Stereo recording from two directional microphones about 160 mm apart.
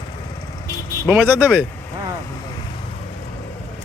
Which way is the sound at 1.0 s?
15° right (ahead or behind).